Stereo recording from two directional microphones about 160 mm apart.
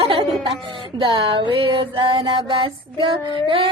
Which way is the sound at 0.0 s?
30° right (ahead or behind).